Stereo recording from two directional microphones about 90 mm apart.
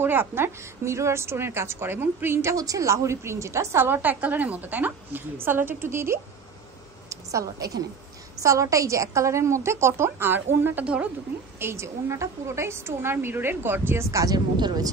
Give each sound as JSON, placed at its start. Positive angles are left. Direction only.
{"t": 0.0, "sound": "a woman's voice", "side_deg": -25}
{"t": 2.5, "sound": "a woman's voice", "side_deg": -40}
{"t": 7.1, "sound": "a sound", "side_deg": -40}
{"t": 8.4, "sound": "a woman's voice", "side_deg": -35}
{"t": 11.6, "sound": "a woman's voice", "side_deg": -30}
{"t": 14.1, "sound": "speech", "side_deg": -45}